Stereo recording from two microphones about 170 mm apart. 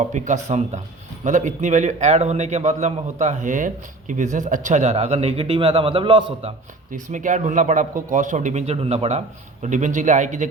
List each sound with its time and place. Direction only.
0.0 s a man's voice: 45° right (ahead or behind); by 6.5 s 30° right (ahead or behind)
6.9 s a man's voice: 50° right (ahead or behind)